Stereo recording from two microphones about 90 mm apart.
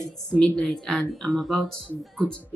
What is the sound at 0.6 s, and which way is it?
Speech, 5° left (ahead or behind).